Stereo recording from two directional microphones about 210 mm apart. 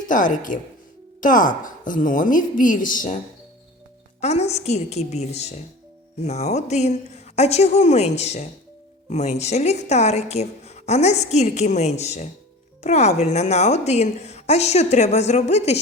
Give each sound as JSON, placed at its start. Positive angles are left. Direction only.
{"t": 0.1, "sound": "a woman's voice", "side_deg": 40}
{"t": 4.2, "sound": "a woman's voice", "side_deg": 30}